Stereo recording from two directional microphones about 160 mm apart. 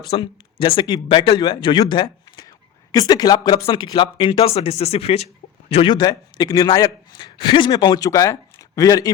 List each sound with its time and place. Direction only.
0.0 s speech: 30° left (ahead or behind)